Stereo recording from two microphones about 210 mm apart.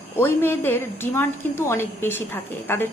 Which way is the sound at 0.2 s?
10° left (ahead or behind).